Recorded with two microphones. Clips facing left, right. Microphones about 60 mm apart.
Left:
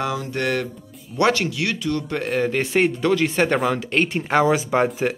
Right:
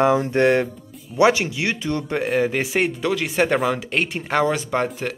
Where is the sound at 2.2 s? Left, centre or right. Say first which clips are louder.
Right 2 dB; centre.